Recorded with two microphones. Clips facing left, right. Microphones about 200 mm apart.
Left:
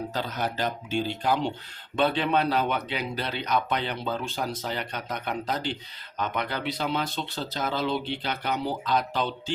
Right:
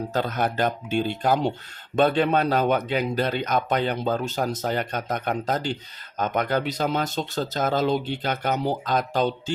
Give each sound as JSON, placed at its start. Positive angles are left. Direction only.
{"t": 0.1, "sound": "speech", "side_deg": -50}